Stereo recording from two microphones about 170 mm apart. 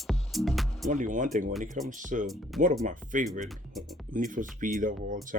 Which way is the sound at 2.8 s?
50° right (ahead or behind).